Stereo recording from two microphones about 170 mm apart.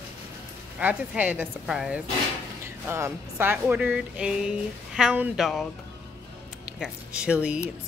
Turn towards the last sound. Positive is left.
turn(degrees=-5)  # may be behind; listen again after turning